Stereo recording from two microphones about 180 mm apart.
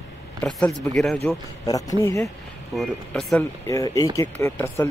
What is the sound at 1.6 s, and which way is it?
Speech, 20° left (ahead or behind).